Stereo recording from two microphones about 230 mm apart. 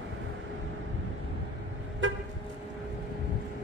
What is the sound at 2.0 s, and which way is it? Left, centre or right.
Vehicle, right.